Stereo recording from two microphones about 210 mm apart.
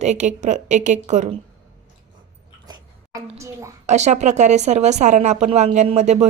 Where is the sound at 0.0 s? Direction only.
35° right (ahead or behind).